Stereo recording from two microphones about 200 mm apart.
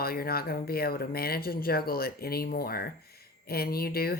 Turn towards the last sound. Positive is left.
turn(degrees=50)  # may be behind; listen again after turning